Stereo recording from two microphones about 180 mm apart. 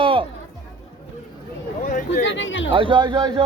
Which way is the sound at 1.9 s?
50° left (ahead or behind).